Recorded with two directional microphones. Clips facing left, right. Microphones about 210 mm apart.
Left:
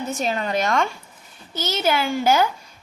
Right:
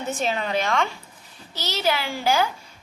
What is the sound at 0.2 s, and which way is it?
A woman's voice, 45° left (ahead or behind).